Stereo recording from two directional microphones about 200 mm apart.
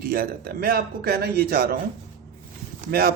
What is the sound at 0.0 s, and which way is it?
A man's voice, 45° right (ahead or behind).